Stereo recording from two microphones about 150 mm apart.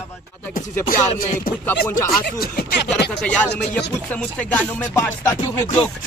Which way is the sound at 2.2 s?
90° left.